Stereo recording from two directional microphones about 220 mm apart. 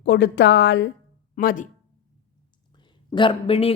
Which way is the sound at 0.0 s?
50° left (ahead or behind).